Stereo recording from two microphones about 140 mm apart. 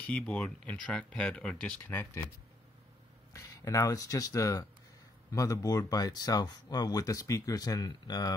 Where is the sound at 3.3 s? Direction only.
25° left (ahead or behind).